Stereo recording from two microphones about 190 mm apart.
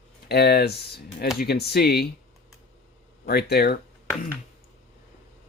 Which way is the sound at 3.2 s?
55° left (ahead or behind).